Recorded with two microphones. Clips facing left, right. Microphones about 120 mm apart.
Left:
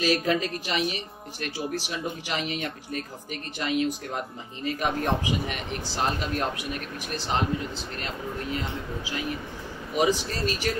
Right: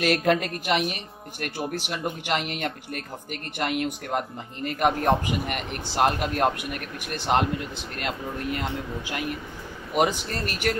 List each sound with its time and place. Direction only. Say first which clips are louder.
0.0 s speech: right 2 dB; 60° right (ahead or behind)